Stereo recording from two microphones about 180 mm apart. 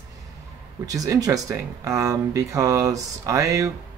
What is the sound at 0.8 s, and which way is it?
Speech, 20° right (ahead or behind).